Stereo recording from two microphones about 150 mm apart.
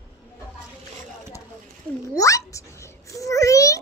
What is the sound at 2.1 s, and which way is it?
Babbling, 20° left (ahead or behind).